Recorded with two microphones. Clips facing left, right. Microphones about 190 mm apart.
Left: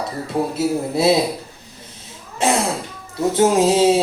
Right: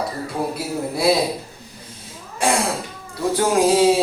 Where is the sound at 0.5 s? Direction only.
25° left (ahead or behind).